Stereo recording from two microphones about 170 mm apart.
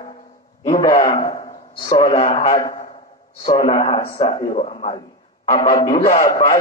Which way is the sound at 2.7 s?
35° left (ahead or behind).